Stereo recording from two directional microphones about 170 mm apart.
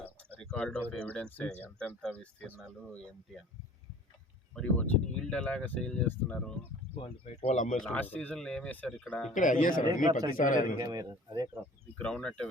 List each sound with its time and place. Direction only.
0.4 s speech: 5° left (ahead or behind)
4.5 s speech: 5° left (ahead or behind)
6.9 s speech: 40° left (ahead or behind)
7.9 s speech: 10° left (ahead or behind)
9.3 s speech: 50° left (ahead or behind)
10.1 s speech: 20° right (ahead or behind)
10.3 s speech: 50° left (ahead or behind)
10.8 s speech: 20° right (ahead or behind)
11.9 s speech: 5° left (ahead or behind)